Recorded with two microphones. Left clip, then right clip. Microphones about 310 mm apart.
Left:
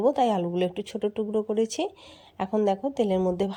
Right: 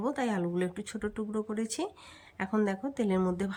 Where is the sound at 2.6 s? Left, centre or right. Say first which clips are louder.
Left 10 dB; centre.